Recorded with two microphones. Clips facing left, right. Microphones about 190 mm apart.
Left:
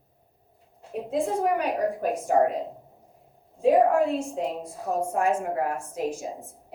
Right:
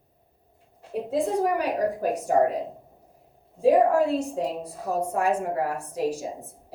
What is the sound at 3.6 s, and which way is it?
A woman's voice, 35° right (ahead or behind).